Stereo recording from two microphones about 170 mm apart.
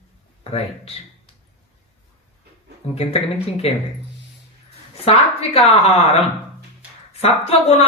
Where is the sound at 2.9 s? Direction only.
35° left (ahead or behind).